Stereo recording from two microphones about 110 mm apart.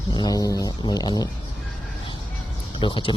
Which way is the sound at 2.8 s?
50° left (ahead or behind).